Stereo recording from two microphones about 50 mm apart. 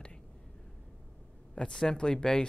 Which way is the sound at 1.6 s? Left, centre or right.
Centre.